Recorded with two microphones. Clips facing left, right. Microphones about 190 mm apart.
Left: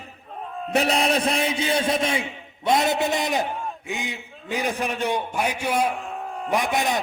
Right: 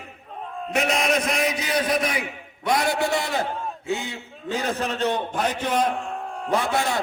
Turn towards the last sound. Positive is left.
turn(degrees=15)  # may be behind; listen again after turning